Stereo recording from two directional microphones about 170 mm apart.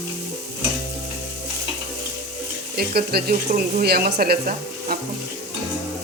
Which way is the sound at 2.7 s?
65° right (ahead or behind).